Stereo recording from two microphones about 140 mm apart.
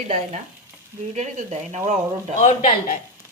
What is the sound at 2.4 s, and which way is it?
Speech, 50° left (ahead or behind).